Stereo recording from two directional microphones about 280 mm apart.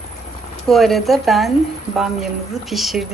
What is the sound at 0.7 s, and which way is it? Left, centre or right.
Speech, centre.